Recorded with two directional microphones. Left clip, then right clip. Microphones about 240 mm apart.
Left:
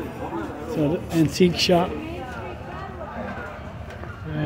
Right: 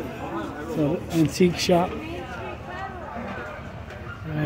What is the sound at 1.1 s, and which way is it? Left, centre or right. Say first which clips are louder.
Speech: left 2 dB; centre.